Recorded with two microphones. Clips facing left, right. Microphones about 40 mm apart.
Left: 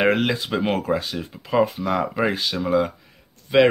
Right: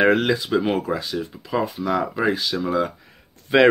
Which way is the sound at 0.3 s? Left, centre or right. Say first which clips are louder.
Right 2 dB; left.